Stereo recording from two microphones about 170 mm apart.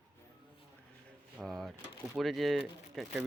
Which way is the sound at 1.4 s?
Centre (ahead or behind).